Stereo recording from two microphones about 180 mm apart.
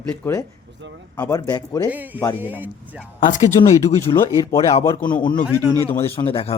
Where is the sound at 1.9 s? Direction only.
10° right (ahead or behind).